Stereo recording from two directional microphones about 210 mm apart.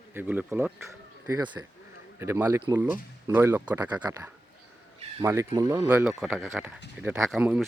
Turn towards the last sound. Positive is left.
turn(degrees=-5)  # may be behind; listen again after turning